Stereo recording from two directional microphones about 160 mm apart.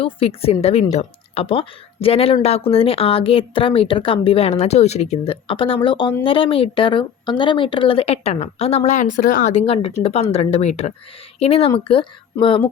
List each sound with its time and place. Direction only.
0.0 s speech: 35° left (ahead or behind)